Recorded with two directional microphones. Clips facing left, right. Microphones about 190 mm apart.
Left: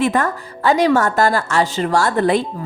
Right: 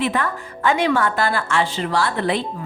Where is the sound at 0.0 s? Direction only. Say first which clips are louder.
Left 4 dB; 45° left (ahead or behind).